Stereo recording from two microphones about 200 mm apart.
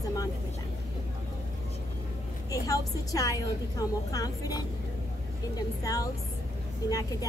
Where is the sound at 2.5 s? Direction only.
15° left (ahead or behind).